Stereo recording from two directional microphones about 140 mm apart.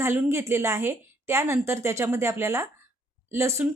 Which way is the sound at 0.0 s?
20° right (ahead or behind).